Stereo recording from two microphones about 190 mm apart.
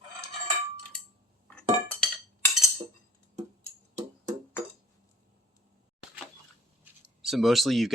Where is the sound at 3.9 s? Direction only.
40° right (ahead or behind).